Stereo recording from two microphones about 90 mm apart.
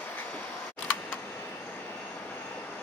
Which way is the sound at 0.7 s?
15° left (ahead or behind).